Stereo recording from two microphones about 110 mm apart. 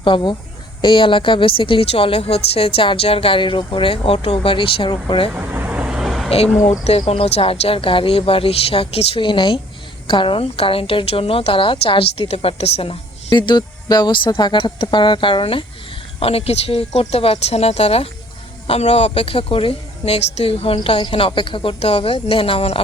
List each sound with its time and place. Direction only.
0.0 s a woman's voice: 45° left (ahead or behind)
5.3 s vehicle: 15° right (ahead or behind)
6.6 s a woman's voice: 75° left (ahead or behind); by 15.6 s 50° left (ahead or behind)
16.2 s a woman's voice: 65° left (ahead or behind)
20.7 s a woman's voice: 50° left (ahead or behind)